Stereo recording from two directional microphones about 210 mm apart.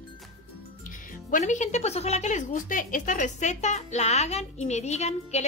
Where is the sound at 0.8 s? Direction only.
40° left (ahead or behind).